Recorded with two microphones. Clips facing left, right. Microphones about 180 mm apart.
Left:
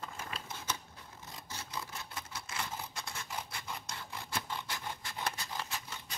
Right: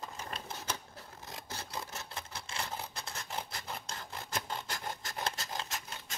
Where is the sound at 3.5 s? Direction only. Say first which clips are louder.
Right 1 dB; 40° right (ahead or behind).